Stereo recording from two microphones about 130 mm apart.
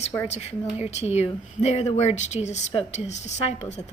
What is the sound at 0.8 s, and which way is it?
A woman's voice, 55° left (ahead or behind).